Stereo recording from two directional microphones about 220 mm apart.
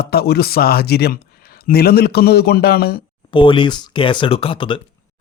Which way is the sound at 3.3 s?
20° left (ahead or behind).